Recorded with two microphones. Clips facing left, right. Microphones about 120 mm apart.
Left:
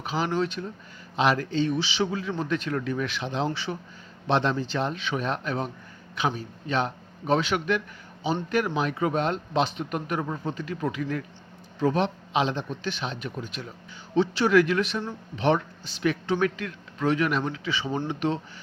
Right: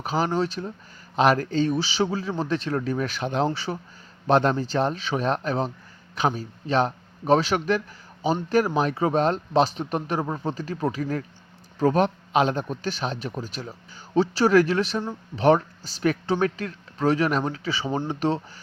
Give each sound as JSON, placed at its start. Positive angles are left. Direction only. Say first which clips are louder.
{"t": 0.0, "sound": "a man's voice", "louder": "right 2 dB", "side_deg": -40}
{"t": 1.1, "sound": "a man's voice", "louder": "right 3 dB", "side_deg": -45}